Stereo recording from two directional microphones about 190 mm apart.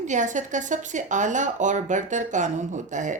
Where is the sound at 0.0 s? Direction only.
40° right (ahead or behind).